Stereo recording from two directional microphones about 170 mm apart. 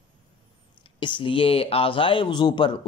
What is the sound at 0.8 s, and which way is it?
Speech, 30° left (ahead or behind).